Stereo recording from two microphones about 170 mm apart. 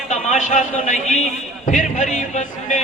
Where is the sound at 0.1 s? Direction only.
45° left (ahead or behind).